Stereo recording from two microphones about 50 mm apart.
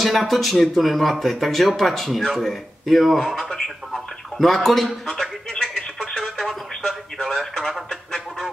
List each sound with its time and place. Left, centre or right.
0.0 s speech: centre
3.3 s speech: centre
5.0 s radio: centre
7.2 s speech: centre